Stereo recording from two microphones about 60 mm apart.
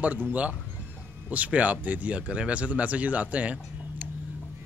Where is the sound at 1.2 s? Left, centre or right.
Right.